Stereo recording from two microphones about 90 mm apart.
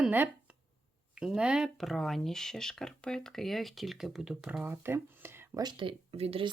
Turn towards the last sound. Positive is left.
turn(degrees=-85)